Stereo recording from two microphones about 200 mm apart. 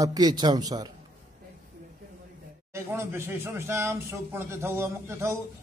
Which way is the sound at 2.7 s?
10° right (ahead or behind).